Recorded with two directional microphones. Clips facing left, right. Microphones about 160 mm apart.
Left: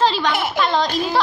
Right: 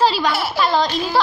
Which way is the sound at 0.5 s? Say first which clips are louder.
Right 1 dB; 5° right (ahead or behind).